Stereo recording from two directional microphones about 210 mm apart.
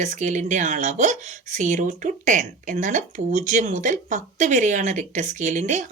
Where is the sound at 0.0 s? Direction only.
35° right (ahead or behind).